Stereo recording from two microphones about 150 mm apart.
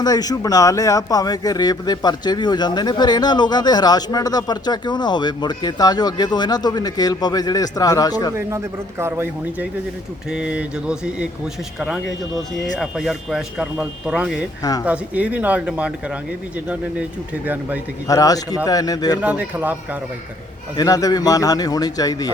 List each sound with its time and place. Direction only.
0.0 s a man's voice: 25° left (ahead or behind)
8.4 s speech: 15° right (ahead or behind)
12.8 s speech: 5° right (ahead or behind)
18.1 s a man's voice: 25° left (ahead or behind)
19.2 s speech: 10° right (ahead or behind)
20.7 s a man's voice: 25° left (ahead or behind)